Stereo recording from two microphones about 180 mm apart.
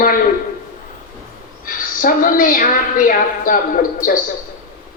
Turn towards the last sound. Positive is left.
turn(degrees=50)  # may be behind; listen again after turning